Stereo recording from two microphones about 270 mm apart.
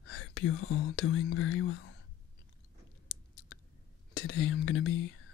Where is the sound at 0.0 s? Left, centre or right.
Left.